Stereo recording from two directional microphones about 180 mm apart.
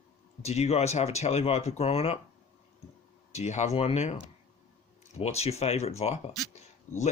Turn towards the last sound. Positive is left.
turn(degrees=40)  # may be behind; listen again after turning